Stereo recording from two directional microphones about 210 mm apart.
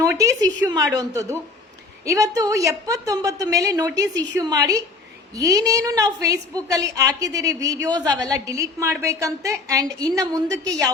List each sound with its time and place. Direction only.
0.0 s a woman's voice: 15° right (ahead or behind)